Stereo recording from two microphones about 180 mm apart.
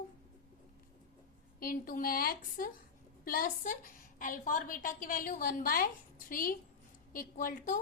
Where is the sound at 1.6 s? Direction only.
50° left (ahead or behind).